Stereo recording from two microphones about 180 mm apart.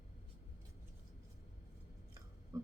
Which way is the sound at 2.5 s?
20° right (ahead or behind).